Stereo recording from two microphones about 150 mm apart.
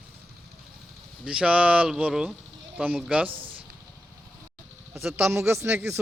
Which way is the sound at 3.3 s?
35° right (ahead or behind).